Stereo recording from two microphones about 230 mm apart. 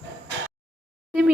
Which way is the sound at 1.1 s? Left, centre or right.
Centre.